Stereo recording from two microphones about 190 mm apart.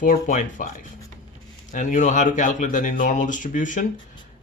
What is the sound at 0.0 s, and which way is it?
Speech, 45° left (ahead or behind).